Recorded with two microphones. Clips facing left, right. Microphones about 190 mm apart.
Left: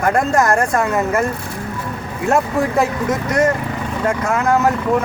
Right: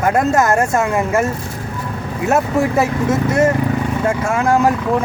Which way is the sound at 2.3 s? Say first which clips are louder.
Right 1 dB; 5° right (ahead or behind).